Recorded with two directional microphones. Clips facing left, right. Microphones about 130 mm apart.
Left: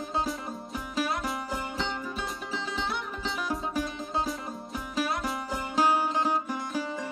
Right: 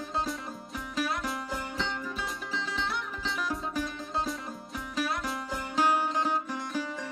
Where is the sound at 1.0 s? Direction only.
25° left (ahead or behind).